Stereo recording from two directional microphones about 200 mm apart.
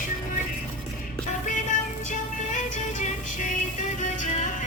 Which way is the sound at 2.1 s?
40° left (ahead or behind).